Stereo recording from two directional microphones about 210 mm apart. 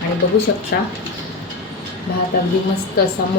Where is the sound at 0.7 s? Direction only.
50° left (ahead or behind).